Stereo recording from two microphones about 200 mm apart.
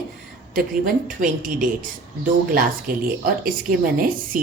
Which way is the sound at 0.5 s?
40° right (ahead or behind).